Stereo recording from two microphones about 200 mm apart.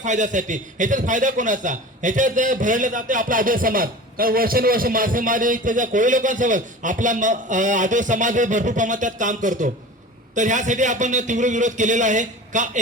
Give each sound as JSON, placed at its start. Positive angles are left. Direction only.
{"t": 0.0, "sound": "a man's voice", "side_deg": -40}